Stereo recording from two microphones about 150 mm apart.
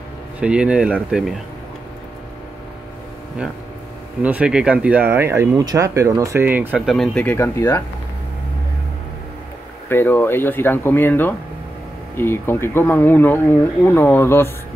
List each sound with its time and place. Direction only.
0.4 s speech: 5° right (ahead or behind)
4.2 s speech: 10° right (ahead or behind)
6.9 s speech: 5° left (ahead or behind)
7.3 s speech: 20° left (ahead or behind)
9.8 s speech: 15° left (ahead or behind)